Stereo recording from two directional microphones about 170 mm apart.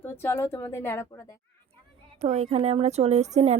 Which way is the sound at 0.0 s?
15° left (ahead or behind).